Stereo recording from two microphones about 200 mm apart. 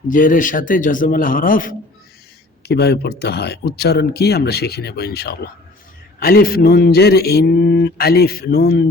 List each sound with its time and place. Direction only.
0.1 s speech: 40° left (ahead or behind)
2.6 s speech: 55° left (ahead or behind)